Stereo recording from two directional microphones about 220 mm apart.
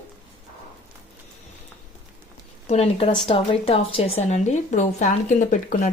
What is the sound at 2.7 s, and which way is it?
A woman's voice, 25° left (ahead or behind).